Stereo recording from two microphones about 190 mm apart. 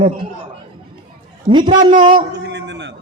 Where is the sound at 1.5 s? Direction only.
25° right (ahead or behind).